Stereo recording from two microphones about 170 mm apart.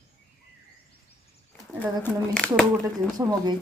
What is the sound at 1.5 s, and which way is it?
Speech, 5° left (ahead or behind).